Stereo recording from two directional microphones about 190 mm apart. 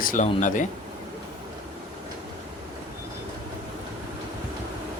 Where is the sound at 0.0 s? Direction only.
40° left (ahead or behind).